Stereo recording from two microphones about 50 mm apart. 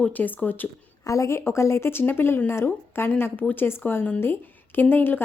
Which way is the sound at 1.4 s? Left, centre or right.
Left.